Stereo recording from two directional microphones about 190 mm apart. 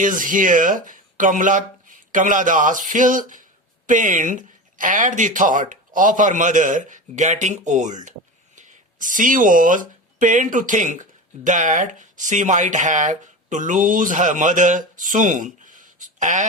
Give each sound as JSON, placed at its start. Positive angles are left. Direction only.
{"t": 0.0, "sound": "speech", "side_deg": -45}